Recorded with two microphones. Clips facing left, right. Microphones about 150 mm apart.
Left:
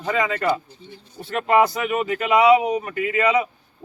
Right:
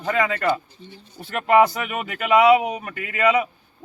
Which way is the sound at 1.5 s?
25° left (ahead or behind).